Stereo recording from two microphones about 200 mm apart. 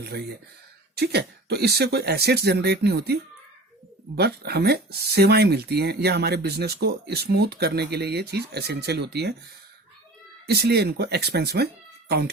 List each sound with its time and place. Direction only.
0.0 s speech: 55° right (ahead or behind)
10.4 s speech: 55° right (ahead or behind)